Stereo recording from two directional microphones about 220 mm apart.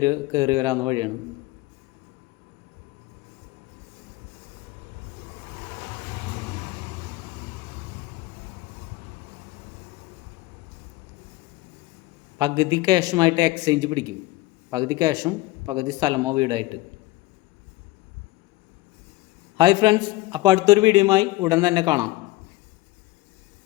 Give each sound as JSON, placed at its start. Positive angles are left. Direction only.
{"t": 0.0, "sound": "speech", "side_deg": -15}
{"t": 12.4, "sound": "speech", "side_deg": -20}
{"t": 19.5, "sound": "a man's voice", "side_deg": -20}